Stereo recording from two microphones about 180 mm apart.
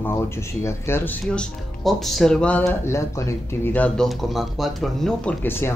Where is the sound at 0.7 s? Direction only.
15° left (ahead or behind).